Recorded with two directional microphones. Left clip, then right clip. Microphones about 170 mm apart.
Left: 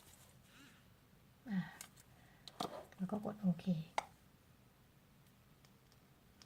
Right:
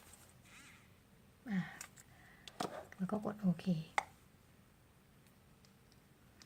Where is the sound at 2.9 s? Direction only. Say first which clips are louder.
Right 3 dB; 20° right (ahead or behind).